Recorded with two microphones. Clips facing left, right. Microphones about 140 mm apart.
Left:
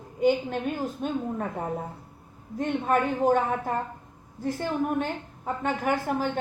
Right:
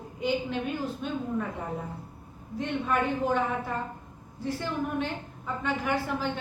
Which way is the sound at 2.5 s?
45° left (ahead or behind).